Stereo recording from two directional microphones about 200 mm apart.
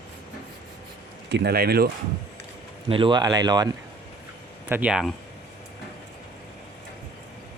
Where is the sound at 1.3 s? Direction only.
55° right (ahead or behind).